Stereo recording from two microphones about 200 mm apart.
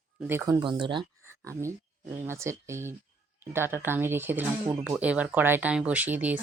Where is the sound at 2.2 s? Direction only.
15° right (ahead or behind).